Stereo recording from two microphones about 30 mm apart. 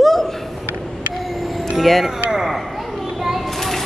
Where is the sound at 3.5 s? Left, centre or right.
Centre.